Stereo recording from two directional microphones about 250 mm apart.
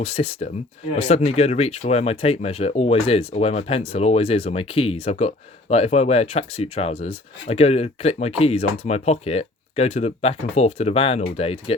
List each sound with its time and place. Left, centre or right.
0.0 s speech: left